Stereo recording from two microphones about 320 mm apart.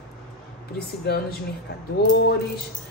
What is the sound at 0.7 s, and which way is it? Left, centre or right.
Speech, left.